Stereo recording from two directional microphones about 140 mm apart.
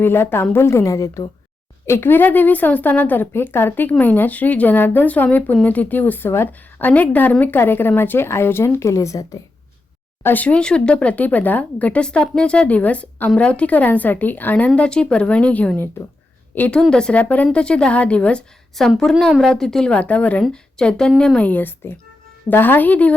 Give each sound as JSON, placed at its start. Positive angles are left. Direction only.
{"t": 0.0, "sound": "a woman's voice", "side_deg": 15}
{"t": 10.2, "sound": "a woman's voice", "side_deg": 10}